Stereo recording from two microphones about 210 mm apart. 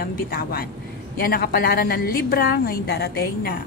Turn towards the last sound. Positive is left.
turn(degrees=50)  # may be behind; listen again after turning